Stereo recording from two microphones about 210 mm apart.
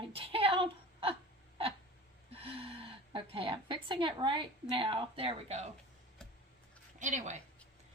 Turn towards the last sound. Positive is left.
turn(degrees=-35)  # may be behind; listen again after turning